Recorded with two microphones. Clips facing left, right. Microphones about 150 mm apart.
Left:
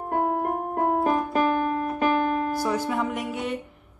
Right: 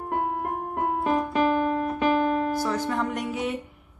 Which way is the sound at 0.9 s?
45° left (ahead or behind).